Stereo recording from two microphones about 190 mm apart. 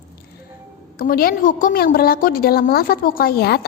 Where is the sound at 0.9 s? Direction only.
50° left (ahead or behind).